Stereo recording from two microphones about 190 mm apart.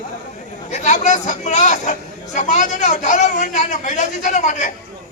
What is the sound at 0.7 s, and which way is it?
Speech, 40° left (ahead or behind).